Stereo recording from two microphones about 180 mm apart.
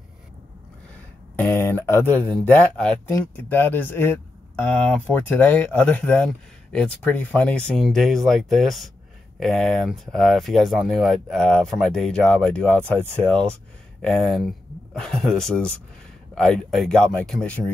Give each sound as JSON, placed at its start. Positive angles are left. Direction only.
{"t": 1.3, "sound": "speech", "side_deg": 10}